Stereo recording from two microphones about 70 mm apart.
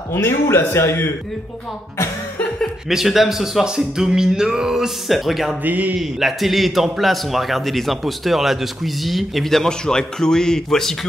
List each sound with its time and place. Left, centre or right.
0.1 s a man's voice: left
2.9 s a man's voice: centre
5.6 s speech: right
5.9 s a man's voice: centre